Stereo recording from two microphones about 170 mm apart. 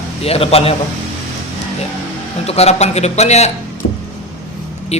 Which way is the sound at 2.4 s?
40° left (ahead or behind).